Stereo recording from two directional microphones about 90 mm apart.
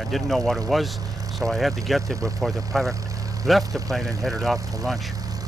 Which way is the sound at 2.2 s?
40° right (ahead or behind).